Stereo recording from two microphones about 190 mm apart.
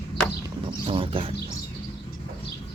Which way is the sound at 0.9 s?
30° right (ahead or behind).